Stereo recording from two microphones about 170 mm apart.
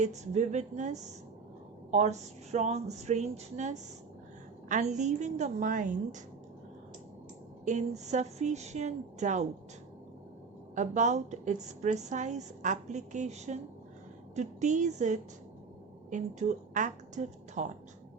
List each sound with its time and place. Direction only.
0.0 s a woman's voice: 45° right (ahead or behind)
7.6 s a woman's voice: 45° right (ahead or behind)
10.8 s a woman's voice: 45° right (ahead or behind)